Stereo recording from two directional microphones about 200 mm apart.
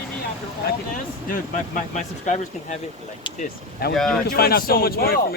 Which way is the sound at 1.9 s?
35° left (ahead or behind).